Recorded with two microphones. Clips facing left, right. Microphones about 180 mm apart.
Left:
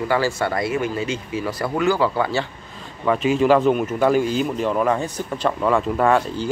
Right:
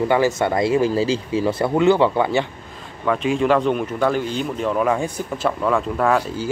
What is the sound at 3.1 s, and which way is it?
Speech, centre (ahead or behind).